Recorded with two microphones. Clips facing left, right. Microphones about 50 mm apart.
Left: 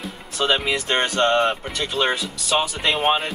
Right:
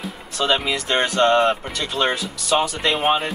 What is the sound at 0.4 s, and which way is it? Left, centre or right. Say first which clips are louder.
Speech: right 1 dB; centre.